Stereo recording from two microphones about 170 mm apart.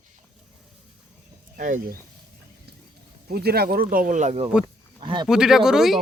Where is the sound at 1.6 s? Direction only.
50° right (ahead or behind).